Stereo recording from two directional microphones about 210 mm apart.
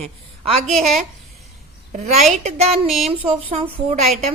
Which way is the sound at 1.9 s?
35° right (ahead or behind).